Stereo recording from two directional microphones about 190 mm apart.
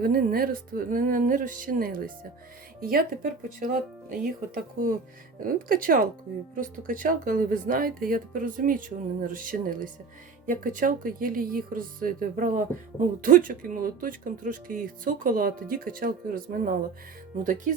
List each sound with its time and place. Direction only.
0.0 s speech: 50° right (ahead or behind)